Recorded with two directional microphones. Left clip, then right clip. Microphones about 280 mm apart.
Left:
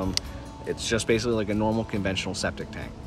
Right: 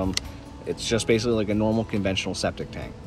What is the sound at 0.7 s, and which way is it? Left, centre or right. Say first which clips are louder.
Speech: right 2 dB; centre.